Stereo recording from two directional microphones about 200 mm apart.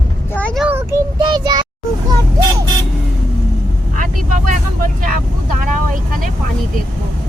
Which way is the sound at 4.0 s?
40° right (ahead or behind).